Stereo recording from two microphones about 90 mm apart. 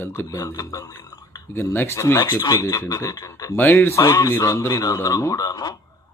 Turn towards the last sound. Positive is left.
turn(degrees=45)  # may be behind; listen again after turning